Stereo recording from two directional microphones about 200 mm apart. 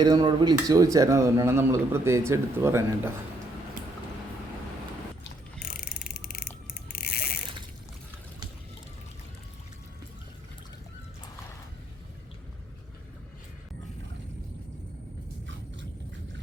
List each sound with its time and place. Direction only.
0.0 s speech: 20° right (ahead or behind)
5.6 s mechanisms: 50° left (ahead or behind)
6.9 s ratchet: 50° left (ahead or behind)